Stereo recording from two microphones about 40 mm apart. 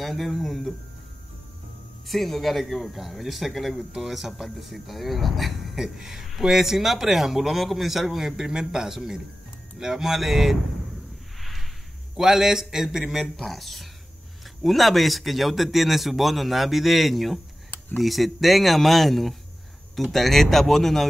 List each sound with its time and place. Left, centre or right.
0.0 s a man's voice: centre
2.0 s a man's voice: centre
12.2 s a man's voice: centre